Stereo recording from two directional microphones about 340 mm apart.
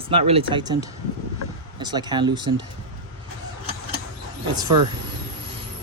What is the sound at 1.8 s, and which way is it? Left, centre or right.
Speech, centre.